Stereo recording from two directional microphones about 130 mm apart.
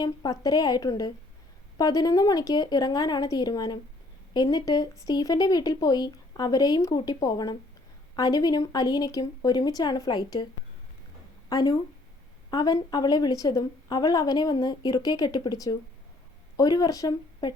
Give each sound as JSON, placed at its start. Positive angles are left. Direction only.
{"t": 0.0, "sound": "a woman's voice", "side_deg": 30}
{"t": 11.4, "sound": "a woman's voice", "side_deg": 30}